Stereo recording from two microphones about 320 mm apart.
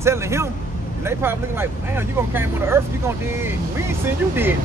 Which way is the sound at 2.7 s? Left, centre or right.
Centre.